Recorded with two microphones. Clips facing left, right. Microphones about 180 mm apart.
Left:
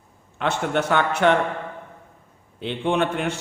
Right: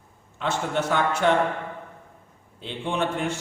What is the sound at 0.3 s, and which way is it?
Speech, 65° left (ahead or behind).